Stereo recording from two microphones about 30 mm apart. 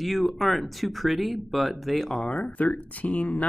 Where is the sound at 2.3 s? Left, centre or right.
Left.